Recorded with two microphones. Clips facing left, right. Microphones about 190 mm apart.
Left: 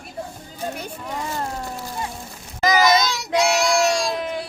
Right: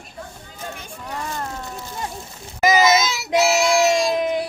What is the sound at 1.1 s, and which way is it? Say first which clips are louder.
Speech: left 1 dB; 15° left (ahead or behind).